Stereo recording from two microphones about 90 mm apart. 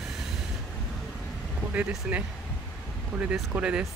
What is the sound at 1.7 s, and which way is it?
Speech, 15° right (ahead or behind).